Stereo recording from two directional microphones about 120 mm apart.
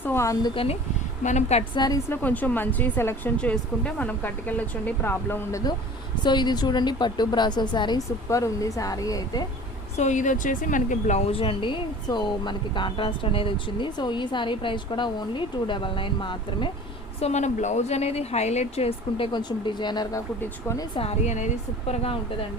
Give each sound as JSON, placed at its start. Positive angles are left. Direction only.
{"t": 0.0, "sound": "speech", "side_deg": 20}
{"t": 0.5, "sound": "speech", "side_deg": 50}
{"t": 1.2, "sound": "speech", "side_deg": 75}
{"t": 1.7, "sound": "speech", "side_deg": 35}
{"t": 2.0, "sound": "speech", "side_deg": 15}
{"t": 6.2, "sound": "speech", "side_deg": 40}
{"t": 10.0, "sound": "speech", "side_deg": 90}
{"t": 11.3, "sound": "speech", "side_deg": 50}
{"t": 17.2, "sound": "speech", "side_deg": 65}
{"t": 20.1, "sound": "speech", "side_deg": 25}
{"t": 20.9, "sound": "speech", "side_deg": 55}
{"t": 21.2, "sound": "speech", "side_deg": 85}